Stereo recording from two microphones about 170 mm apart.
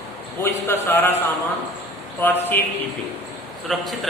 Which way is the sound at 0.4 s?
15° left (ahead or behind).